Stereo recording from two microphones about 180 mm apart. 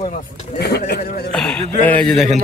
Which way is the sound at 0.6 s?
65° left (ahead or behind).